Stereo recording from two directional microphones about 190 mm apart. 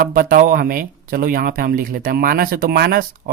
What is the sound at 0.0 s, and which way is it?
Speech, 50° right (ahead or behind).